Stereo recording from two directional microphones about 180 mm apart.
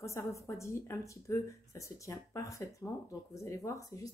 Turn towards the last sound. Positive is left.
turn(degrees=20)  # may be behind; listen again after turning